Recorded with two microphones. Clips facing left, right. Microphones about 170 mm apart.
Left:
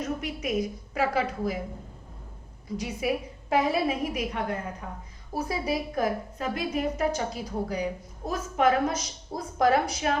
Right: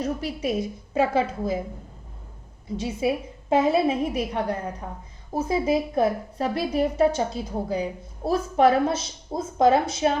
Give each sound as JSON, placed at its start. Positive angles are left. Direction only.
{"t": 0.0, "sound": "a woman's voice", "side_deg": -35}
{"t": 2.6, "sound": "a woman's voice", "side_deg": -25}